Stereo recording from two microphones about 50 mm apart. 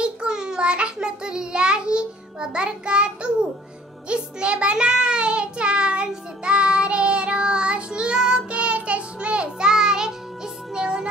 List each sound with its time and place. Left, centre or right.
0.0 s child singing: centre